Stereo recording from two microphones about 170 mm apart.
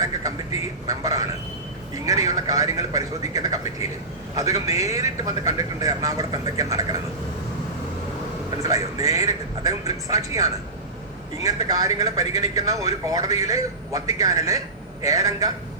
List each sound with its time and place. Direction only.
0.0 s a sound: 20° right (ahead or behind)
0.9 s a man's voice: 20° right (ahead or behind)
8.6 s a man's voice: 20° right (ahead or behind)